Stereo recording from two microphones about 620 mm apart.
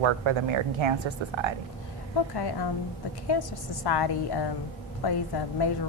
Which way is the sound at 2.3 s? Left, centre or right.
Left.